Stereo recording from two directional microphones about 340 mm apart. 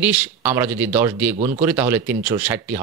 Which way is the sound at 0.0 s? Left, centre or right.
Centre.